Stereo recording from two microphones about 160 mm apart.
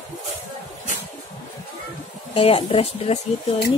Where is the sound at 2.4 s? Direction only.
35° left (ahead or behind).